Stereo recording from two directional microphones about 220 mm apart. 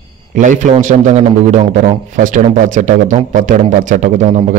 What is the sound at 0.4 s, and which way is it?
A man's voice, 35° right (ahead or behind).